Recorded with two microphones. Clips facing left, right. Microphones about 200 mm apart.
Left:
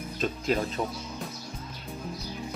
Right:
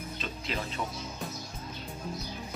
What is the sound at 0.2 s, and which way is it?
Speech, 45° left (ahead or behind).